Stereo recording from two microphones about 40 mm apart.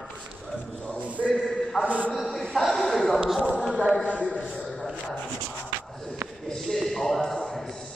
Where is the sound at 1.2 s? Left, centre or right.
Left.